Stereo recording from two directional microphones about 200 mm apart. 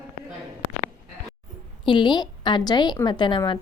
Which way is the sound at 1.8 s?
25° left (ahead or behind).